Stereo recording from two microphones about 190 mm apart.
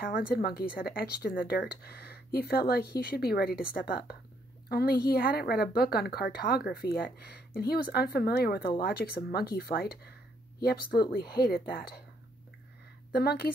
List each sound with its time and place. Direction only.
0.3 s a woman's voice: 55° left (ahead or behind)
13.1 s a woman's voice: 55° left (ahead or behind)